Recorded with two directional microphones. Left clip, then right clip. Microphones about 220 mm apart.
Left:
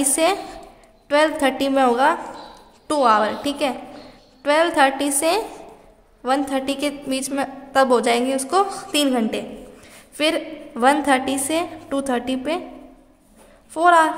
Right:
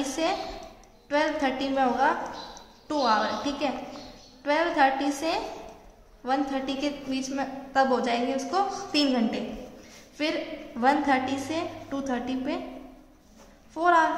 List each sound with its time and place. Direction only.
0.0 s a woman's voice: 50° left (ahead or behind)
13.7 s a woman's voice: 50° left (ahead or behind)